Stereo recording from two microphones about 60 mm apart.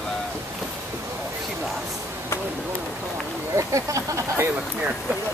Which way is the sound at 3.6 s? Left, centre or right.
Right.